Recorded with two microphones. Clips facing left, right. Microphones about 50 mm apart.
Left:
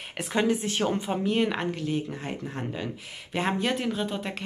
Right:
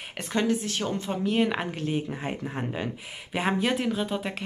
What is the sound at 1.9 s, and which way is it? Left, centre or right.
Speech, centre.